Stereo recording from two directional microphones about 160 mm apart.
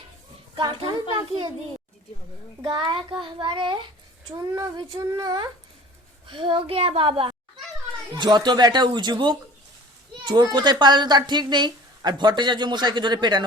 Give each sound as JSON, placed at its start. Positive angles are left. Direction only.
{"t": 0.5, "sound": "a child's voice", "side_deg": -30}
{"t": 2.6, "sound": "a child's voice", "side_deg": -30}